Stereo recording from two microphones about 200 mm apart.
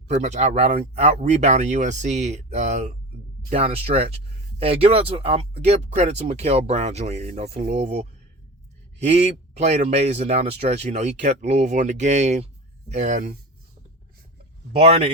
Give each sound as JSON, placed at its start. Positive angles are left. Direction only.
{"t": 0.1, "sound": "a man's voice", "side_deg": -35}
{"t": 14.8, "sound": "speech", "side_deg": -30}